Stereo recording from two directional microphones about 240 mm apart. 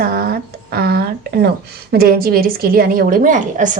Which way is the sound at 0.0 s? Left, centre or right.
Right.